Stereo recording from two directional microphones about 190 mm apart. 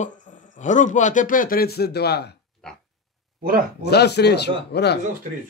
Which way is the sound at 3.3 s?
50° right (ahead or behind).